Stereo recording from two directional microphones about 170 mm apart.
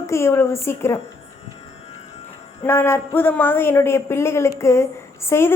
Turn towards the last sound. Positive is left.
turn(degrees=15)  # may be behind; listen again after turning